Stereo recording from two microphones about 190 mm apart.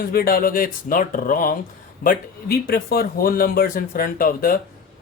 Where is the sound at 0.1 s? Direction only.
50° left (ahead or behind).